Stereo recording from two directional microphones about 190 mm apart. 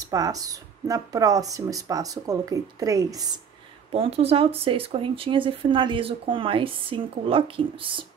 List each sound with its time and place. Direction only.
0.0 s speech: 20° right (ahead or behind)
3.9 s speech: 30° right (ahead or behind)